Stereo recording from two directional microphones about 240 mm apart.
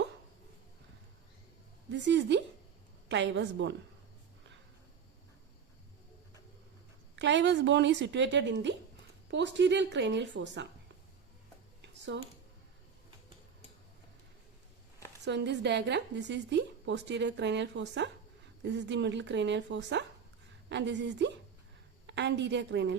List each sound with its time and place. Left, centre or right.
1.9 s a woman's voice: right
7.2 s a woman's voice: right
11.8 s a sound: right
15.2 s a woman's voice: right